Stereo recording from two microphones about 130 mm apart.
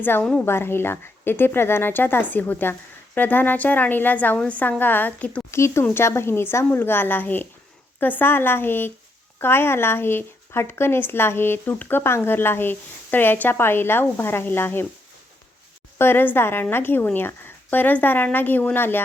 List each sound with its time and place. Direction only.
0.0 s speech: 10° left (ahead or behind)
16.0 s speech: 15° left (ahead or behind)